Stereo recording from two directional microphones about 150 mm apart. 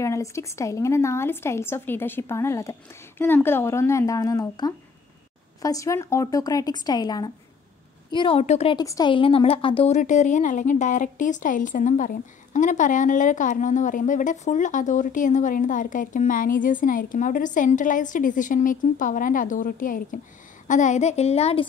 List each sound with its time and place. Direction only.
0.0 s speech: 20° left (ahead or behind); by 8.7 s 45° left (ahead or behind)
8.7 s speech: 25° left (ahead or behind)
9.1 s speech: 35° left (ahead or behind)
9.9 s a woman's voice: 55° left (ahead or behind)